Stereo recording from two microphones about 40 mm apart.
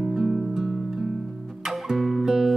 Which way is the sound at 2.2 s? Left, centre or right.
Centre.